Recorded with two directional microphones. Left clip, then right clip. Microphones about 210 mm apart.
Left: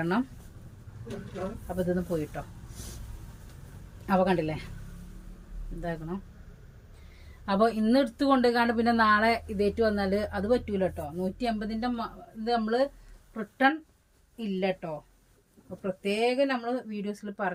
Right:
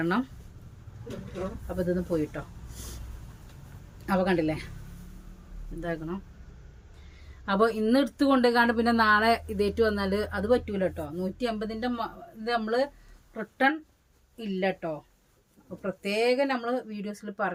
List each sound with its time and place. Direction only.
0.0 s a woman's voice: 20° right (ahead or behind)
1.7 s a woman's voice: 25° right (ahead or behind)
4.0 s a woman's voice: 25° right (ahead or behind)
7.4 s a woman's voice: 25° right (ahead or behind)
14.3 s a woman's voice: 20° right (ahead or behind)